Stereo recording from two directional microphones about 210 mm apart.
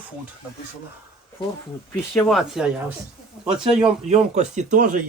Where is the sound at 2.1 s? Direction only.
Centre (ahead or behind).